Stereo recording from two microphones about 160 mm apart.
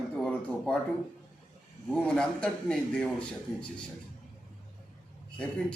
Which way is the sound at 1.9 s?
5° left (ahead or behind).